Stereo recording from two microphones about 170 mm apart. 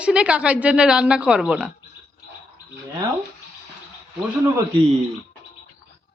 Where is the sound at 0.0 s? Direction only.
5° right (ahead or behind).